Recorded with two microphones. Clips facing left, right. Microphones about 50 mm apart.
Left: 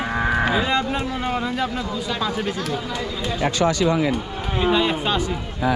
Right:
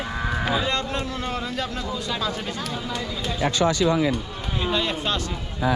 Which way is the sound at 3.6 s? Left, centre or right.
Left.